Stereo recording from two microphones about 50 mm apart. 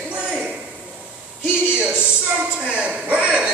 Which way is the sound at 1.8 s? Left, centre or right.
Right.